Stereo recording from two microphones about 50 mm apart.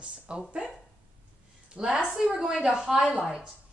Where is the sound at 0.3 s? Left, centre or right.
Right.